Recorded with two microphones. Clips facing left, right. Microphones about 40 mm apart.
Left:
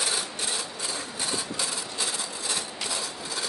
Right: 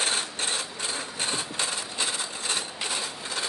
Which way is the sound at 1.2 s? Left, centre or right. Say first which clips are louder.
Right 1 dB; right.